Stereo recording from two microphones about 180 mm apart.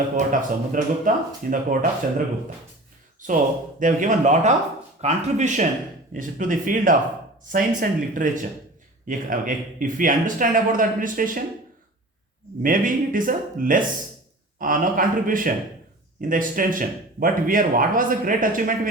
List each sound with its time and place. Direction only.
0.2 s speech: 45° right (ahead or behind)
3.2 s speech: 45° right (ahead or behind)
12.6 s speech: 50° right (ahead or behind)